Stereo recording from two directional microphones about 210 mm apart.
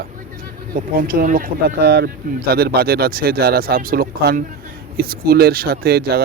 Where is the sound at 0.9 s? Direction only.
40° right (ahead or behind).